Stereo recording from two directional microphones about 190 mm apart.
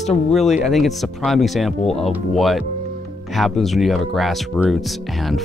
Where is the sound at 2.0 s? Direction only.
Centre (ahead or behind).